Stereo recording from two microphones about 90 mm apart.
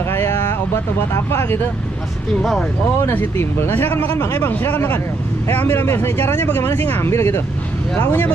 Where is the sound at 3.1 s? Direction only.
25° left (ahead or behind).